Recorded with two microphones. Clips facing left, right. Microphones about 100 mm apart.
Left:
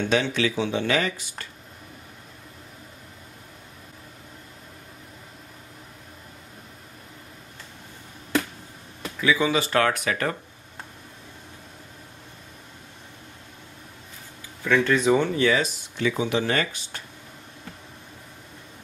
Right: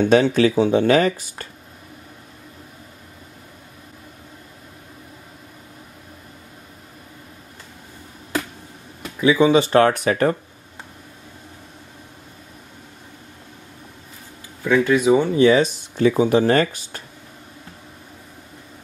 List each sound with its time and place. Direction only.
0.1 s speech: 40° right (ahead or behind)
9.2 s speech: 25° right (ahead or behind)
14.6 s speech: 10° right (ahead or behind)
15.3 s speech: 25° right (ahead or behind); by 17.0 s 40° right (ahead or behind)